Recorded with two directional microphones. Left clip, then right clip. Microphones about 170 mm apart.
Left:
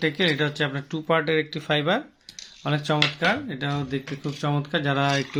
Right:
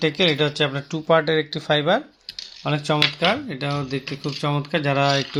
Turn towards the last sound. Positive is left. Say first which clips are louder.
# right 4 dB
turn(degrees=-10)  # may be behind; listen again after turning